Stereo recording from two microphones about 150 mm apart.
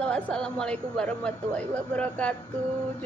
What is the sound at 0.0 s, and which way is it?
Speech, 5° left (ahead or behind).